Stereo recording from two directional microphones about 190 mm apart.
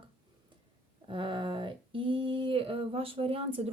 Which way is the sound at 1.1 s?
25° right (ahead or behind).